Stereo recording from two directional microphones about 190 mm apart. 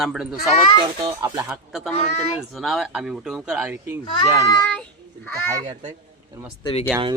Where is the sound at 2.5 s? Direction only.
Centre (ahead or behind).